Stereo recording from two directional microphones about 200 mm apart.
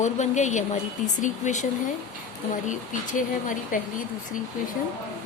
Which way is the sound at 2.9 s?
40° left (ahead or behind).